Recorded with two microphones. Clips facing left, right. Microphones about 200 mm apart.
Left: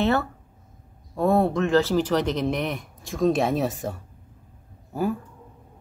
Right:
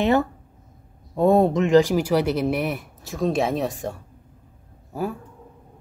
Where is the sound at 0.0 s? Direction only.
15° right (ahead or behind); by 3.9 s centre (ahead or behind).